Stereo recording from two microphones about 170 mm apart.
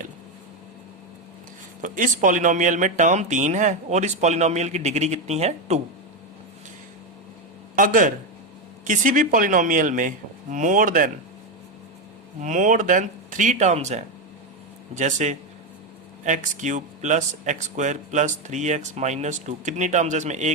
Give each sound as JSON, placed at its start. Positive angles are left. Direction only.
{"t": 1.8, "sound": "speech", "side_deg": -50}
{"t": 7.8, "sound": "speech", "side_deg": -50}
{"t": 12.4, "sound": "speech", "side_deg": -50}